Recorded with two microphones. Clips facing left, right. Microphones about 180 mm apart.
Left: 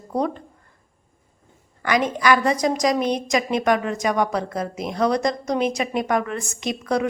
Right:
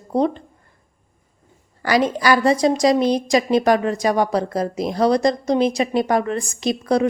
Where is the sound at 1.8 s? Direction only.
35° right (ahead or behind).